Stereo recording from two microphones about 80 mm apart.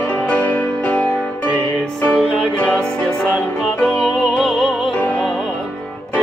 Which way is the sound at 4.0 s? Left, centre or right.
Centre.